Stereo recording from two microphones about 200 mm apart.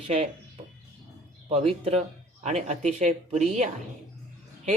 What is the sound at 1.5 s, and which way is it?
Speech, 30° right (ahead or behind).